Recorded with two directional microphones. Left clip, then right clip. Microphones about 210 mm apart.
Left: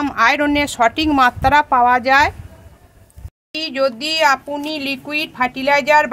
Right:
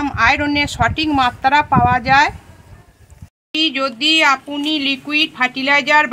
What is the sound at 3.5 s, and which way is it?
Speech, 60° left (ahead or behind).